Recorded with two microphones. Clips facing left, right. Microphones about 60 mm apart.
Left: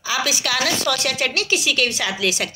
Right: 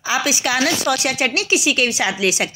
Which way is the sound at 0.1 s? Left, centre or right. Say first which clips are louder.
Right 3 dB; centre.